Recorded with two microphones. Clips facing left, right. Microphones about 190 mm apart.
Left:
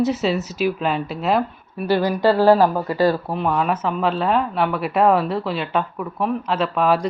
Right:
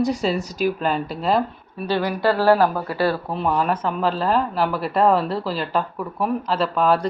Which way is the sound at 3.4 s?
Centre (ahead or behind).